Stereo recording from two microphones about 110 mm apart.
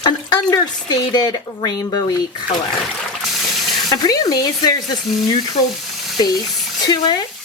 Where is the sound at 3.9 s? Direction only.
35° left (ahead or behind).